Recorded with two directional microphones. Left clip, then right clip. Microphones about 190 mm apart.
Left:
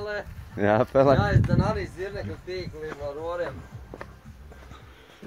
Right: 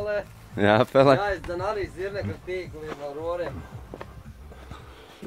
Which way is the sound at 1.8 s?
50° left (ahead or behind).